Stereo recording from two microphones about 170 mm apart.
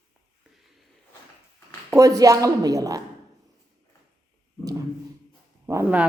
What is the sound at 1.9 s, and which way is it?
A woman's voice, 20° right (ahead or behind).